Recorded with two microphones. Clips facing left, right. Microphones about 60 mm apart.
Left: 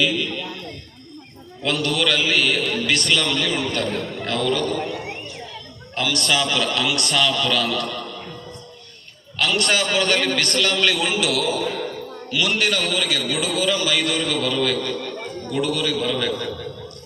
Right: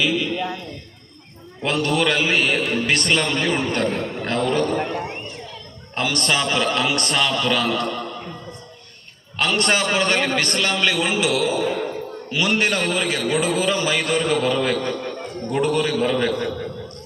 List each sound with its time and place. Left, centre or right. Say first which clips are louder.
0.0 s a sound: right 1 dB; centre
1.6 s a man's voice: right 2 dB; right
9.6 s a man's voice: right 1 dB; right